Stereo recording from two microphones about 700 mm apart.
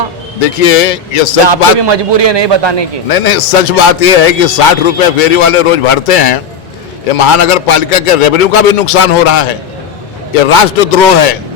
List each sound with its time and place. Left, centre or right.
0.6 s a man's voice: left
1.5 s a man's voice: right
3.1 s a man's voice: left